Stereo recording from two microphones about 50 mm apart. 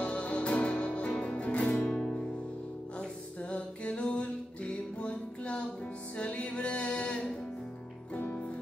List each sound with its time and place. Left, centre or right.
0.0 s music: left
1.9 s music: centre